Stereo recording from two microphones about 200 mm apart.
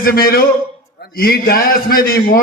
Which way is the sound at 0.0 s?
50° left (ahead or behind).